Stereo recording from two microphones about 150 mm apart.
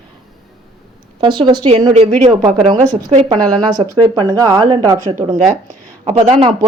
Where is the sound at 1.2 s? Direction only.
30° right (ahead or behind).